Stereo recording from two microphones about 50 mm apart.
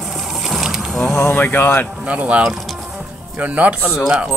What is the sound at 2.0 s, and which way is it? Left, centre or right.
Speech, right.